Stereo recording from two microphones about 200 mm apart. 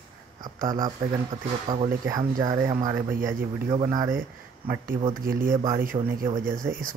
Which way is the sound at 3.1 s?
45° right (ahead or behind).